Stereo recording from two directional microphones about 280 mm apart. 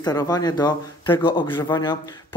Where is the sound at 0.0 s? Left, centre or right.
Centre.